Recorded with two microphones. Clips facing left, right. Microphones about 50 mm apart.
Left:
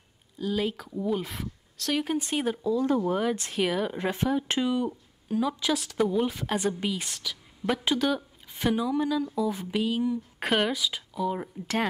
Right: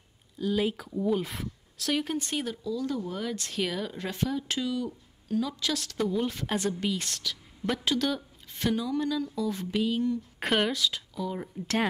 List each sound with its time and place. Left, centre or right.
0.4 s a woman's voice: centre
2.4 s a woman's voice: left; by 11.8 s centre